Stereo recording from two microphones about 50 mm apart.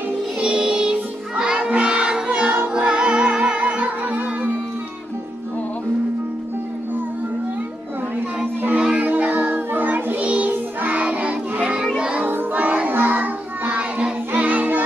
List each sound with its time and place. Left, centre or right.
0.4 s music: centre
8.7 s music: right
12.0 s child singing: right
12.3 s child singing: right
14.3 s music: right